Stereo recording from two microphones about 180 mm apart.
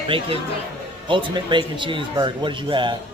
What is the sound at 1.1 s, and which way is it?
Speech, 25° right (ahead or behind).